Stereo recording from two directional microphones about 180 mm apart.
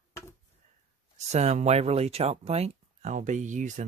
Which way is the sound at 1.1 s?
40° right (ahead or behind).